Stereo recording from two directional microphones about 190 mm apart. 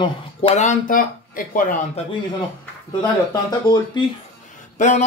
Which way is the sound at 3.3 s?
20° left (ahead or behind).